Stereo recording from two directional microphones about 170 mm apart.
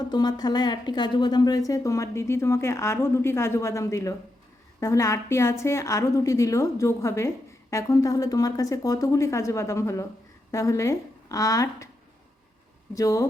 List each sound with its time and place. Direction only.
0.0 s a woman's voice: 25° left (ahead or behind)
12.9 s a woman's voice: 20° left (ahead or behind)